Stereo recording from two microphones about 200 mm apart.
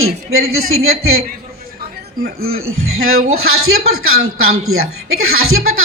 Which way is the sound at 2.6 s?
90° right.